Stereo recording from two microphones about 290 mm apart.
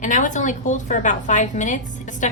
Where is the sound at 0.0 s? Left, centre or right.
Left.